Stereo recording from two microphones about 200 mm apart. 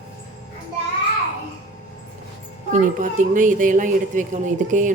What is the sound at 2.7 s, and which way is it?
Speech, 40° right (ahead or behind).